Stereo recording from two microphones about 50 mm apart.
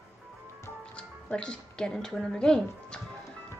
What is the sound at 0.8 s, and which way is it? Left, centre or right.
Speech, centre.